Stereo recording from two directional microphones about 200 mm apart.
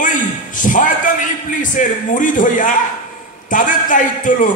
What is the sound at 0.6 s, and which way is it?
A man's voice, 40° left (ahead or behind).